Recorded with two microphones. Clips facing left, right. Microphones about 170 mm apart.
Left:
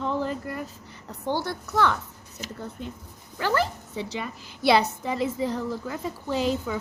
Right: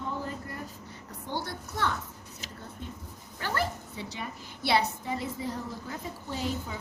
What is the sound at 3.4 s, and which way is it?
A woman's voice, 90° left.